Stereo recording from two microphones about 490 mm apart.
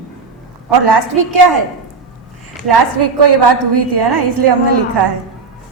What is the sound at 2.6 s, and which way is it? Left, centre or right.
A woman's voice, right.